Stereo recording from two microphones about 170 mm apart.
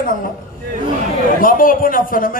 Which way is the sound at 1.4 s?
55° left (ahead or behind).